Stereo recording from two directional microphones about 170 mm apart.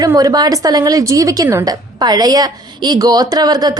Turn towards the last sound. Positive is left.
turn(degrees=-25)  # may be behind; listen again after turning